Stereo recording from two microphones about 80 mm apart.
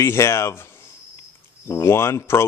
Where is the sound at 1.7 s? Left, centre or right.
Left.